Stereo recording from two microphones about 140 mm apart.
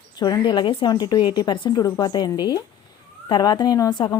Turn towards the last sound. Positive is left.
turn(degrees=30)  # may be behind; listen again after turning